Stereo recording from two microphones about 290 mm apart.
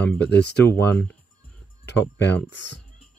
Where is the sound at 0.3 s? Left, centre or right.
Left.